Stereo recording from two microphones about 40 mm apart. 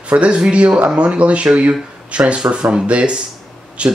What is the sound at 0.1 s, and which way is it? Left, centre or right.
Speech, right.